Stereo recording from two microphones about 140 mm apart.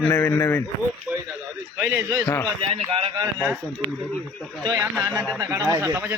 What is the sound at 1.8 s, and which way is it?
Speech, 15° right (ahead or behind).